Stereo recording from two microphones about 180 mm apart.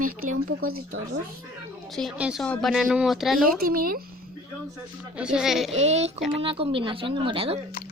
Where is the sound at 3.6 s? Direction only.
50° right (ahead or behind).